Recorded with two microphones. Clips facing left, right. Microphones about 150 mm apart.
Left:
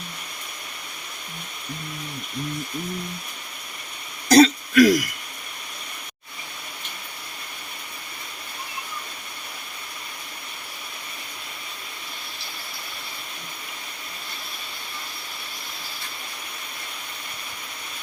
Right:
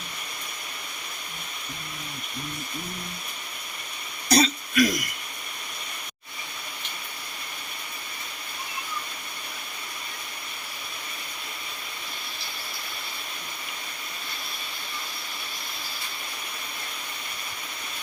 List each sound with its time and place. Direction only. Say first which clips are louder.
4.3 s throat clearing: left 8 dB; 90° left